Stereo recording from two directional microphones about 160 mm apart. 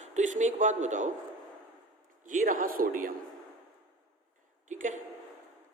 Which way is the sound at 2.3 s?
55° right (ahead or behind).